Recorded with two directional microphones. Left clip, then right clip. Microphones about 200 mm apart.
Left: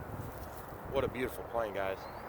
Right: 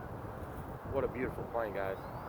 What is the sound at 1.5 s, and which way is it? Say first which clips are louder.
Speech: left 2 dB; 20° left (ahead or behind).